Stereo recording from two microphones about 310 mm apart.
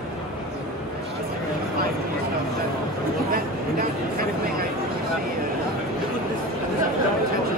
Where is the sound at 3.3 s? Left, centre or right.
Right.